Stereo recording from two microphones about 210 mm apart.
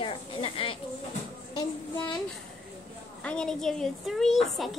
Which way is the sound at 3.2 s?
5° left (ahead or behind).